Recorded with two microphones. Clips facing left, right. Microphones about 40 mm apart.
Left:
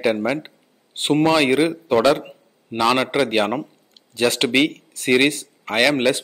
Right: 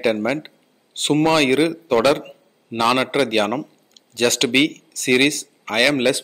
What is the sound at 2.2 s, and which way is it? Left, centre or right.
A man's voice, centre.